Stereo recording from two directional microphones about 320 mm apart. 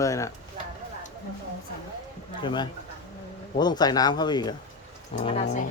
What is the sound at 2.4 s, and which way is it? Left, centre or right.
A man's voice, centre.